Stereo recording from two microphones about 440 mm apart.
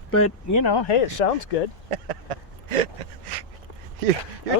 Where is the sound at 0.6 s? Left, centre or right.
Left.